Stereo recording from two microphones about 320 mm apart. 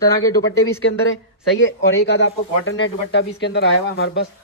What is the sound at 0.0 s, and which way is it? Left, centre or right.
Speech, centre.